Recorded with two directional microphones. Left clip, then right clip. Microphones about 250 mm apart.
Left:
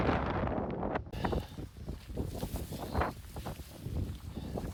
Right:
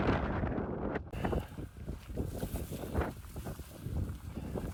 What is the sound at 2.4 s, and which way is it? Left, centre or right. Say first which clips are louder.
Boat: even; centre.